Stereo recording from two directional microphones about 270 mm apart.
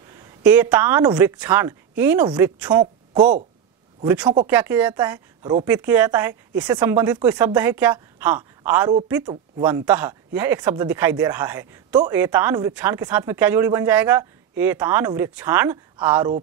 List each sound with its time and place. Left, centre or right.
0.2 s speech: centre
4.0 s speech: centre